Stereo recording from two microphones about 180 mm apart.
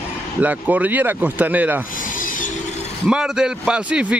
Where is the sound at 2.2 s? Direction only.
50° left (ahead or behind).